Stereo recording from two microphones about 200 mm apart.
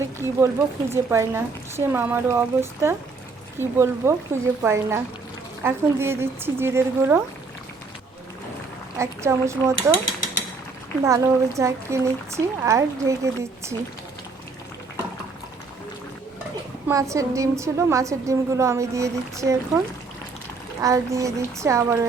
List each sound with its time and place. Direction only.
0.2 s a woman's voice: 10° right (ahead or behind)
9.0 s a woman's voice: 15° right (ahead or behind)
11.0 s a woman's voice: 15° right (ahead or behind)
16.9 s a woman's voice: 15° right (ahead or behind)
20.8 s a woman's voice: 15° right (ahead or behind)